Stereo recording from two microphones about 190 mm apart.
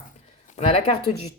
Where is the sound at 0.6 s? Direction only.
30° left (ahead or behind).